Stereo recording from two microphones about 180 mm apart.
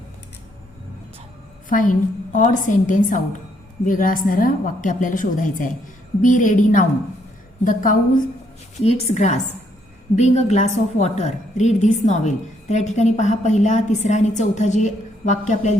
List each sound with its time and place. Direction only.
1.7 s a woman's voice: 45° left (ahead or behind)
8.8 s a woman's voice: 35° left (ahead or behind)